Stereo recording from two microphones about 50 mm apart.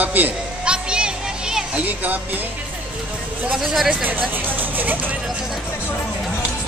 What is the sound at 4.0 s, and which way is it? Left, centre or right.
Speech, right.